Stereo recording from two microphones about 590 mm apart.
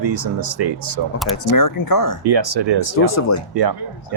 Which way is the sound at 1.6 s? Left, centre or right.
Left.